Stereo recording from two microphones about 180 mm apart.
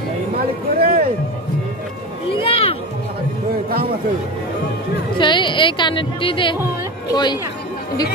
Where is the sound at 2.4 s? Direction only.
30° left (ahead or behind).